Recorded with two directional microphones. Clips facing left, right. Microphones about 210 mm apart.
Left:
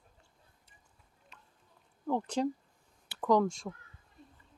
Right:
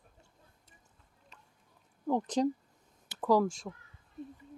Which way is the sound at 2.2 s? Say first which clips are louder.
Right 3 dB; 40° right (ahead or behind).